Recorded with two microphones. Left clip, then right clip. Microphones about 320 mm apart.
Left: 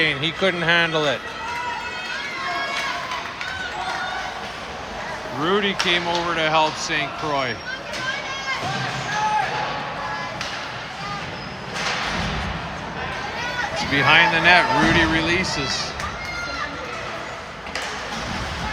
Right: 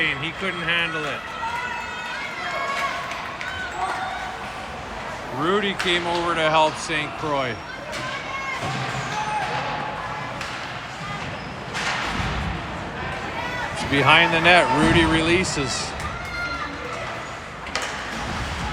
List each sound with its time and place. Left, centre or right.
0.0 s speech: centre
5.4 s speech: centre
13.9 s speech: centre